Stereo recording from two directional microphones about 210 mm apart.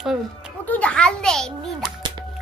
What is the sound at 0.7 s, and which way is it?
A child's voice, 5° left (ahead or behind).